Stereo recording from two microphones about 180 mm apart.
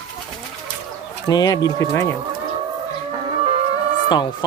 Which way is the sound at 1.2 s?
20° left (ahead or behind).